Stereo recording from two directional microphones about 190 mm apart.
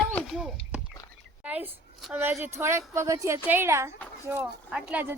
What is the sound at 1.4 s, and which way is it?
A woman's voice, 10° right (ahead or behind).